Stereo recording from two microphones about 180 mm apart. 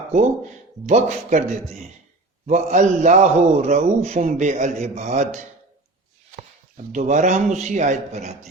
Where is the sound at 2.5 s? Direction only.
40° right (ahead or behind).